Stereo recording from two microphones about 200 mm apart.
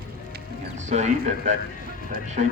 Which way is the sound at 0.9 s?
35° right (ahead or behind).